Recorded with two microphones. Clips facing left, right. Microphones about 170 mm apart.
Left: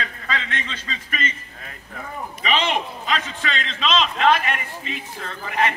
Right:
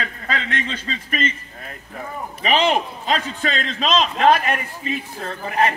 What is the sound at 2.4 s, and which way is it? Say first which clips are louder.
A man's voice: right 4 dB; 35° right (ahead or behind).